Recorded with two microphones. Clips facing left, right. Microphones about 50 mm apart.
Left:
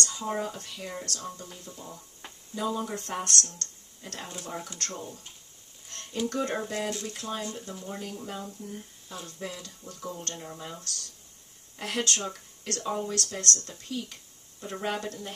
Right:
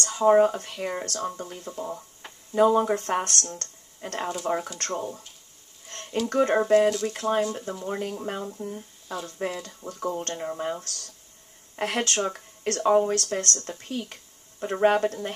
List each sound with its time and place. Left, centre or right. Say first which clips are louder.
0.0 s speech: right 13 dB; right
5.9 s a sound: right 4 dB; right
6.2 s speech: right 8 dB; right